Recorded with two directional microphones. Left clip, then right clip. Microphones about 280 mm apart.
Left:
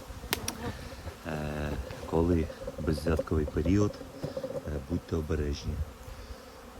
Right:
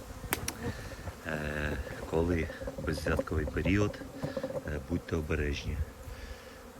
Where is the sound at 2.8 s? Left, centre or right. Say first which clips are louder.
Left 2 dB; centre.